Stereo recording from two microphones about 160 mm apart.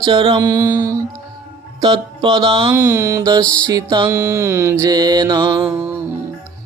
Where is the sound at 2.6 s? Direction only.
20° right (ahead or behind).